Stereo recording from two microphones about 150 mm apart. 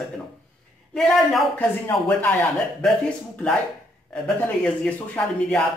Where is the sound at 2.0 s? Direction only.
10° left (ahead or behind).